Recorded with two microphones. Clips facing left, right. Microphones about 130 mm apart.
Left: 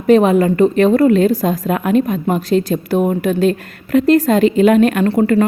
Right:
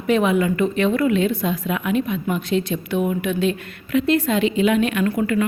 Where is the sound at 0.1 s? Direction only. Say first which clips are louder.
Left 7 dB; 40° left (ahead or behind).